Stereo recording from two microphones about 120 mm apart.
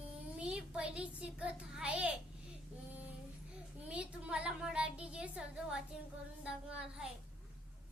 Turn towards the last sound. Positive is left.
turn(degrees=-10)  # may be behind; listen again after turning